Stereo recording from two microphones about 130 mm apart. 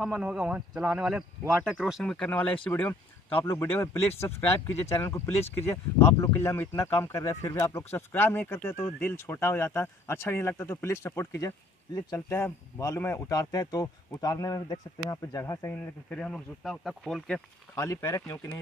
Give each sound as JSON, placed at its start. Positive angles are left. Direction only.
{"t": 0.0, "sound": "speech", "side_deg": -5}
{"t": 15.7, "sound": "speech", "side_deg": 10}
{"t": 17.7, "sound": "speech", "side_deg": 25}